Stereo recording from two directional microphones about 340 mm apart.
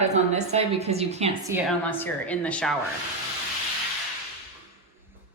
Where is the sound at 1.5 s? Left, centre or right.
Centre.